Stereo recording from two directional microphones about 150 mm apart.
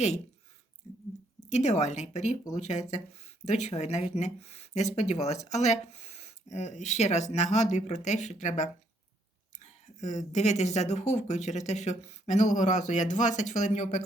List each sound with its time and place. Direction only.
1.4 s speech: 50° left (ahead or behind)